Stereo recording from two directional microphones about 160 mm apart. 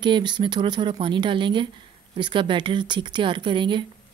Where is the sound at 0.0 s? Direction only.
30° right (ahead or behind).